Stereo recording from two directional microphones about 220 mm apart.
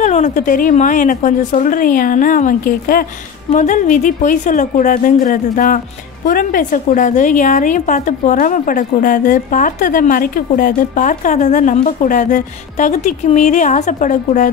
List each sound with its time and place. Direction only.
0.0 s a woman's voice: 35° left (ahead or behind)